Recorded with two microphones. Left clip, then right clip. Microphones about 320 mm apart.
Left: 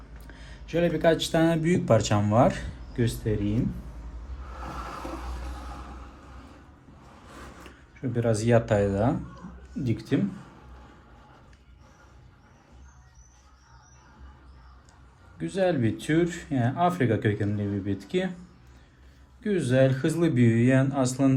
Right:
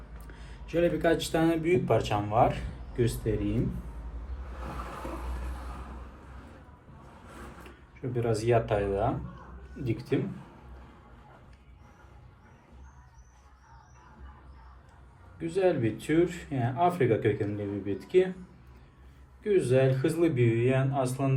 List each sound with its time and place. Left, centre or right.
0.3 s speech: left
8.1 s speech: left
15.4 s speech: left
19.4 s speech: left